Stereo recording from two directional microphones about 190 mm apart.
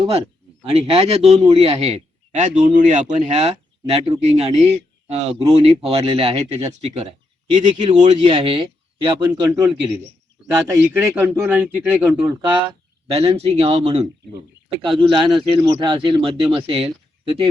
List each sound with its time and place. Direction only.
0.6 s a man's voice: 35° right (ahead or behind)
9.2 s a man's voice: 10° right (ahead or behind)
11.0 s a man's voice: 10° right (ahead or behind)
12.3 s a man's voice: 25° right (ahead or behind)